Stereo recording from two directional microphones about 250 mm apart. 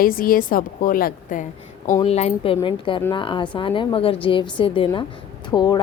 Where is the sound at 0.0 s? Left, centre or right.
Left.